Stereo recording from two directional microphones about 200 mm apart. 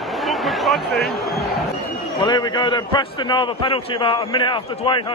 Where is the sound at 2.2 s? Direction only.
20° left (ahead or behind).